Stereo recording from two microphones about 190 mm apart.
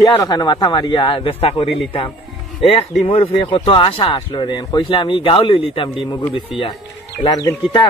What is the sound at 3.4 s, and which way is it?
Speech, 25° left (ahead or behind).